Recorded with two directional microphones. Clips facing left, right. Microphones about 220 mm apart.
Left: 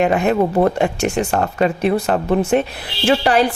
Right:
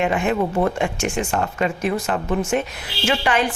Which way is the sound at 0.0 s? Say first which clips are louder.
Left 5 dB; 40° left (ahead or behind).